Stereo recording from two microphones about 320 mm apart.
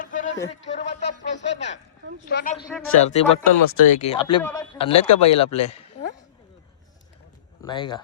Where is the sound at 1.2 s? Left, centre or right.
Left.